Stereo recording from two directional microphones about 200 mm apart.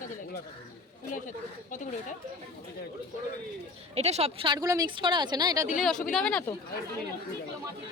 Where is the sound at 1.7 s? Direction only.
40° left (ahead or behind).